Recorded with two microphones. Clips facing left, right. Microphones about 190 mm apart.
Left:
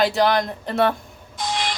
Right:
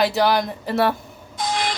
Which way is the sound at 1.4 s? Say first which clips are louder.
Right 2 dB; 55° right (ahead or behind).